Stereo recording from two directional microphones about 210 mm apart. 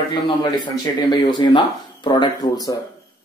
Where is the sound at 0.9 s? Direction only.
25° left (ahead or behind).